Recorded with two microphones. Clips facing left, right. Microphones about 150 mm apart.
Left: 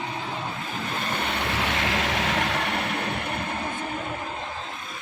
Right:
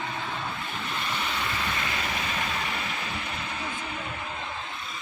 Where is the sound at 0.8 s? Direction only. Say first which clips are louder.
Left 4 dB; 45° left (ahead or behind).